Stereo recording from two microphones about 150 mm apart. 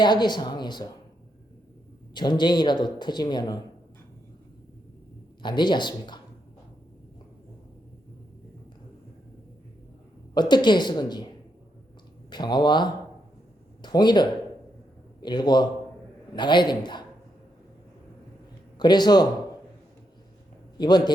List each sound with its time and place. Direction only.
0.0 s speech: 30° left (ahead or behind)
2.1 s speech: 30° left (ahead or behind)
5.4 s speech: 30° left (ahead or behind)
10.3 s speech: 30° left (ahead or behind)
12.3 s a man's voice: 30° left (ahead or behind)
18.8 s speech: 30° left (ahead or behind)
20.7 s speech: 30° left (ahead or behind)